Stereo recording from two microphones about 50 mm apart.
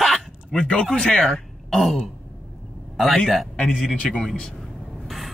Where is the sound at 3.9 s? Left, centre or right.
Left.